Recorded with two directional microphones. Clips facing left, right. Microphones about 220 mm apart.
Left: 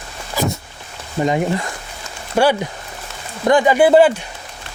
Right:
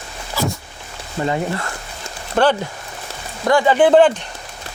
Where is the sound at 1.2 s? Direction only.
15° left (ahead or behind).